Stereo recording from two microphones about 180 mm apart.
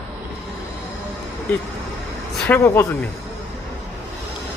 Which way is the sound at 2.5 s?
10° left (ahead or behind).